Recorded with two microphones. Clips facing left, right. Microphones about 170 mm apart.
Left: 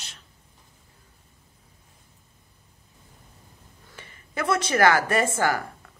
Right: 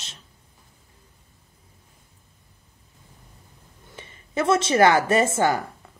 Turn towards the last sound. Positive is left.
turn(degrees=-25)  # may be behind; listen again after turning